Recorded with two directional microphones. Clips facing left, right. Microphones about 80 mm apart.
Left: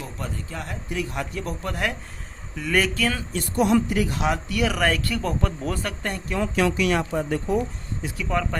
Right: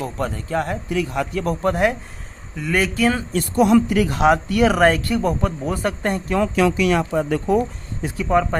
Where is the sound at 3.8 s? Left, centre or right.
Right; by 5.8 s centre.